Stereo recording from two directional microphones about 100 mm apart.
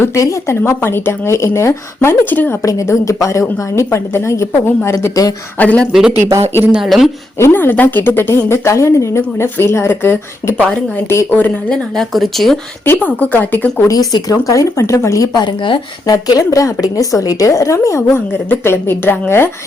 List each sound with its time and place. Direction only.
0.0 s a woman's voice: 30° left (ahead or behind)
2.6 s a woman's voice: 30° left (ahead or behind); by 5.9 s 15° left (ahead or behind)
5.9 s speech: 5° right (ahead or behind)
7.3 s a woman's voice: 25° left (ahead or behind)
11.7 s speech: centre (ahead or behind)
12.8 s a woman's voice: 20° left (ahead or behind)
13.8 s a woman's voice: 40° left (ahead or behind)
15.4 s speech: 50° left (ahead or behind)
16.0 s a woman's voice: 40° left (ahead or behind); by 19.5 s 20° left (ahead or behind)